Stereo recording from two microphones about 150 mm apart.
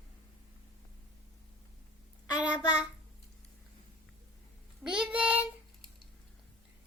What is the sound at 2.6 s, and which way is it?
Child singing, 30° left (ahead or behind).